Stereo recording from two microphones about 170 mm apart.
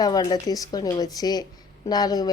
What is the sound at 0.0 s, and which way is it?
Speech, 25° left (ahead or behind).